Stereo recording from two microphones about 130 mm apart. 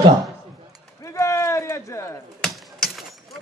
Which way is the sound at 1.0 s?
25° left (ahead or behind).